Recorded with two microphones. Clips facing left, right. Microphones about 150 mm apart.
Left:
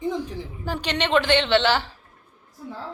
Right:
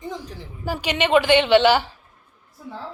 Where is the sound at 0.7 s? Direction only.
10° right (ahead or behind).